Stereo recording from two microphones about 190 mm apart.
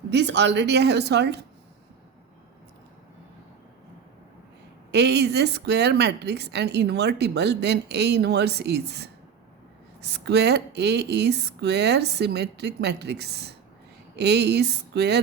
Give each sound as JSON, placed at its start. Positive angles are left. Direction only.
{"t": 0.1, "sound": "speech", "side_deg": -65}
{"t": 4.9, "sound": "speech", "side_deg": -60}